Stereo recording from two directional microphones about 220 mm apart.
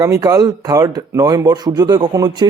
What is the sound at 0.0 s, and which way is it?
Speech, 15° right (ahead or behind).